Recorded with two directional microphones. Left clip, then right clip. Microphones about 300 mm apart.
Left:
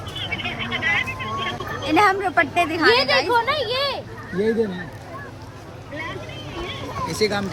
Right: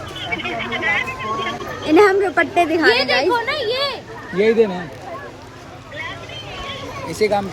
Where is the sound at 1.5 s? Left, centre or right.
Centre.